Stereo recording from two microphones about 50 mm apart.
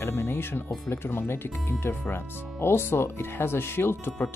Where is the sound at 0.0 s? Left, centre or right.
Left.